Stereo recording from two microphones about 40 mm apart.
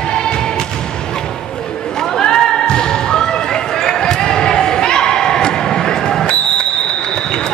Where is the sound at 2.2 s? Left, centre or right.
Centre.